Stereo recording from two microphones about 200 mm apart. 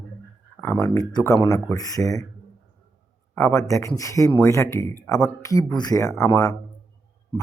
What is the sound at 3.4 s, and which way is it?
Speech, 15° left (ahead or behind).